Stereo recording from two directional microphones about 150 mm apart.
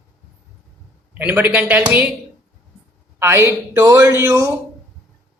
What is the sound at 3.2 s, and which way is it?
A man's voice, 15° right (ahead or behind).